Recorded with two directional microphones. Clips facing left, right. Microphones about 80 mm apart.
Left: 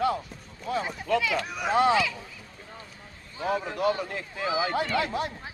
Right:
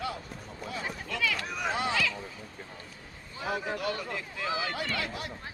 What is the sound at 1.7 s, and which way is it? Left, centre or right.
Speech, left.